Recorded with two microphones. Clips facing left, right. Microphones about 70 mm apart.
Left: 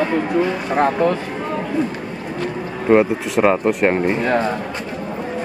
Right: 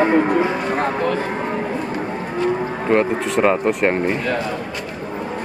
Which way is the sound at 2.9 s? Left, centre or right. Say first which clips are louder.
Left 3 dB; centre.